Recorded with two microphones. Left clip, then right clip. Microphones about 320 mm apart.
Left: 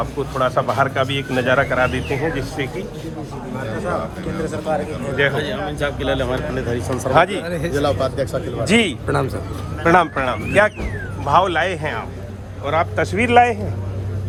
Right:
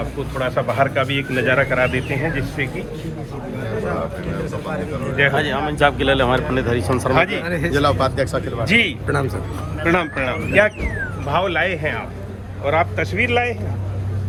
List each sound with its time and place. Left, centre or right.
0.3 s speech: centre
5.4 s speech: centre
7.1 s speech: centre
7.7 s speech: centre
8.6 s a man's voice: centre